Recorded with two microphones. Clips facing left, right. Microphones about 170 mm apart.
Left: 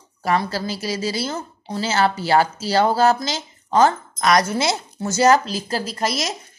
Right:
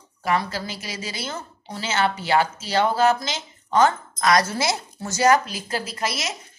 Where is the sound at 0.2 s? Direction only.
35° left (ahead or behind).